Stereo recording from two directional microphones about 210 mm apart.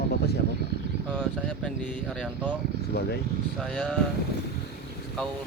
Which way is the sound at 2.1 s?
Centre (ahead or behind).